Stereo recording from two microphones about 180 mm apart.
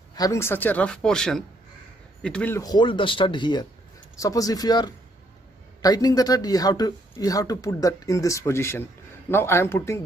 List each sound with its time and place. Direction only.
0.1 s a man's voice: 20° left (ahead or behind)
2.6 s a man's voice: 25° left (ahead or behind)